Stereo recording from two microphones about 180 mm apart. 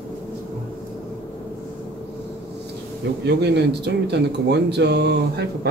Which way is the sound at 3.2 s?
65° right (ahead or behind).